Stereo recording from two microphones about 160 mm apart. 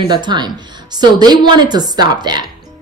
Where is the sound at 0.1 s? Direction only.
25° right (ahead or behind).